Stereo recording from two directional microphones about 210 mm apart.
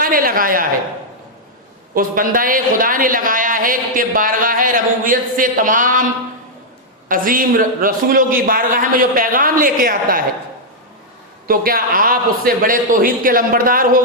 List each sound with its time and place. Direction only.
0.0 s a man's voice: 40° right (ahead or behind)
1.9 s a woman's voice: 40° right (ahead or behind)
7.1 s a woman's voice: 40° right (ahead or behind)
11.4 s a man's voice: 45° right (ahead or behind)